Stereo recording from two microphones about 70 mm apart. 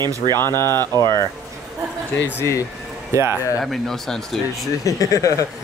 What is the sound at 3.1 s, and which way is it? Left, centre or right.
Speech, right.